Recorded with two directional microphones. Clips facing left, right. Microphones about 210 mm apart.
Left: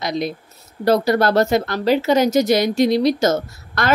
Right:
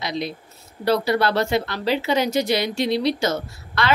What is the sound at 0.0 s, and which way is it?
A woman's voice, 45° left (ahead or behind).